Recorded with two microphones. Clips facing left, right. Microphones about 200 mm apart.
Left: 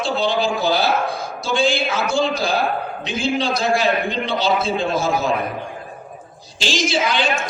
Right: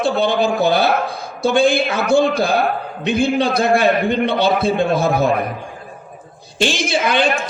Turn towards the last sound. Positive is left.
turn(degrees=-55)  # may be behind; listen again after turning